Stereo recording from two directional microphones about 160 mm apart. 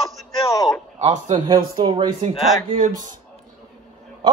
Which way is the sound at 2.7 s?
55° right (ahead or behind).